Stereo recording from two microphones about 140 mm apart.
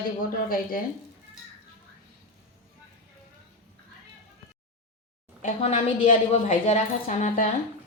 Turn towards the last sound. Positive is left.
turn(degrees=65)  # may be behind; listen again after turning